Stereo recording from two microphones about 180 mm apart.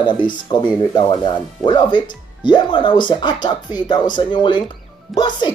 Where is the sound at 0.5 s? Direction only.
25° left (ahead or behind).